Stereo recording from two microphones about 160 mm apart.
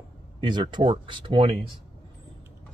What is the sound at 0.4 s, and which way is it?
Speech, 30° right (ahead or behind).